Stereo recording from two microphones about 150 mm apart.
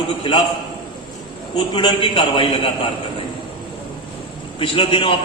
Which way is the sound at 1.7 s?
35° left (ahead or behind).